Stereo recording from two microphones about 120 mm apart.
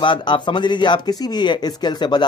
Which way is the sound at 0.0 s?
40° left (ahead or behind).